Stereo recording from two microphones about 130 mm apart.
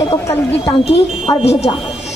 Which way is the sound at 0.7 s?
40° left (ahead or behind).